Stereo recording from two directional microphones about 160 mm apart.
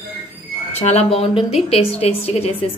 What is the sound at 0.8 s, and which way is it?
A woman's voice, 40° left (ahead or behind).